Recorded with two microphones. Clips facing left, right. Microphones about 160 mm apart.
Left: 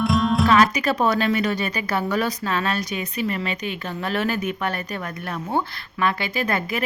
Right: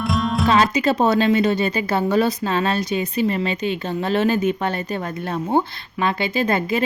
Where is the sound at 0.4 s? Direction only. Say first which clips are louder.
Right 3 dB; 25° right (ahead or behind).